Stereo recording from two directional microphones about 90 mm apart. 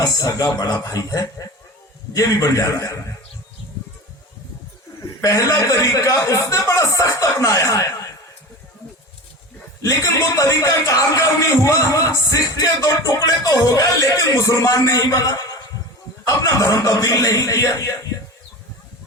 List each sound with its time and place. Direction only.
0.0 s speech: 40° left (ahead or behind)
4.9 s speech: 40° left (ahead or behind)
9.8 s speech: 35° left (ahead or behind)